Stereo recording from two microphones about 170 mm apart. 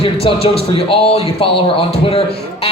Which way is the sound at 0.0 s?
35° left (ahead or behind).